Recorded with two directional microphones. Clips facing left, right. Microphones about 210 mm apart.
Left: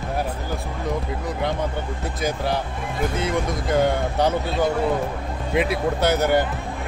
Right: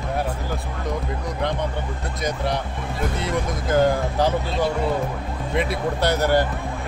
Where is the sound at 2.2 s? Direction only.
Centre (ahead or behind).